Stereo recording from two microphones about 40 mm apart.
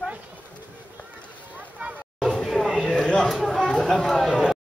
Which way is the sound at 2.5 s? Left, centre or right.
Centre.